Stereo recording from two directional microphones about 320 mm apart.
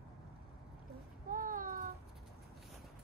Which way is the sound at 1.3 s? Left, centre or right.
Right.